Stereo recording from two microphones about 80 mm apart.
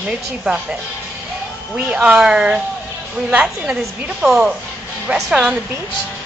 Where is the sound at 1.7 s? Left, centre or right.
Centre.